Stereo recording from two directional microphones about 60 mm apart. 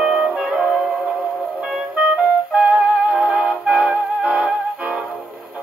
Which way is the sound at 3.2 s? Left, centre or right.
Right.